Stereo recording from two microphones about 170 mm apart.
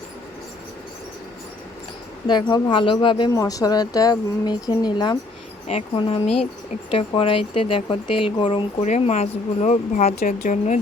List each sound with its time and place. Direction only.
2.2 s speech: 25° left (ahead or behind); by 10.8 s 50° left (ahead or behind)